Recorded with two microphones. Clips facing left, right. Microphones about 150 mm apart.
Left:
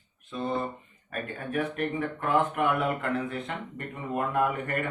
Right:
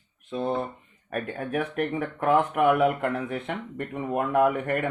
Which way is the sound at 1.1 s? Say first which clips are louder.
Right 3 dB; 60° right (ahead or behind).